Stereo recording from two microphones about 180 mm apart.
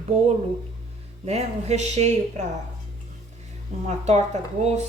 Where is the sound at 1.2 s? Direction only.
35° right (ahead or behind).